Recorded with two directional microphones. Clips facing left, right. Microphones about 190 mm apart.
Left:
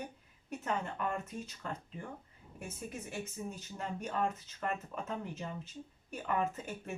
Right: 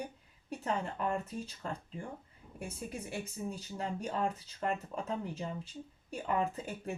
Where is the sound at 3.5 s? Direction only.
35° right (ahead or behind).